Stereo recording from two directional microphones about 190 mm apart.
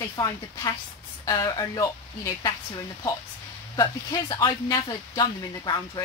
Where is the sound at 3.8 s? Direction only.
20° left (ahead or behind).